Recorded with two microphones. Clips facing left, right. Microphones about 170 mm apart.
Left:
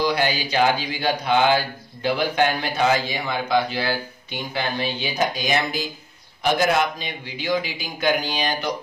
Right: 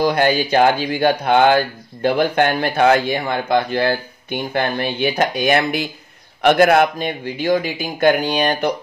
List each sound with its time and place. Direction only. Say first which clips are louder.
0.0 s a man's voice: right 6 dB; 50° right (ahead or behind)